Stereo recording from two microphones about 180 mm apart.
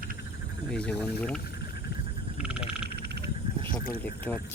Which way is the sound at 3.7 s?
50° left (ahead or behind).